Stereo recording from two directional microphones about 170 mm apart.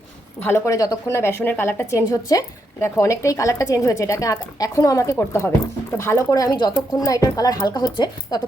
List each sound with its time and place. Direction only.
0.4 s a woman's voice: 15° left (ahead or behind)